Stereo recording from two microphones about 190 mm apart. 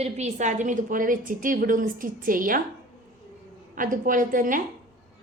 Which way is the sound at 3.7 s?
45° right (ahead or behind).